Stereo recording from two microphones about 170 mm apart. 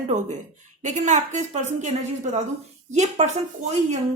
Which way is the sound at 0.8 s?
45° right (ahead or behind).